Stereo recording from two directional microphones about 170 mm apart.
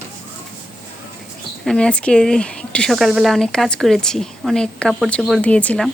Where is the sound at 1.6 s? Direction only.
5° left (ahead or behind).